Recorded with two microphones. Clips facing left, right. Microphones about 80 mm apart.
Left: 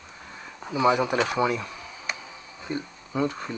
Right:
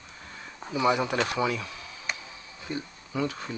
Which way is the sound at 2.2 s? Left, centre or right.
Left.